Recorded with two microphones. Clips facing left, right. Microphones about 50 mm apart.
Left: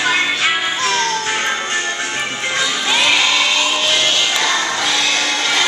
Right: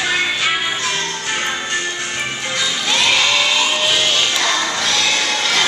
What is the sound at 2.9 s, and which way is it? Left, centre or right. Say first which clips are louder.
Music: left 1 dB; centre.